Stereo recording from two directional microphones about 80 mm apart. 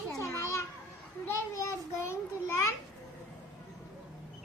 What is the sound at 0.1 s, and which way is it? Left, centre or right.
Children playing, left.